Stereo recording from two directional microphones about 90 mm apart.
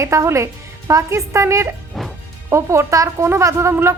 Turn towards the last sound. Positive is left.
turn(degrees=-30)  # may be behind; listen again after turning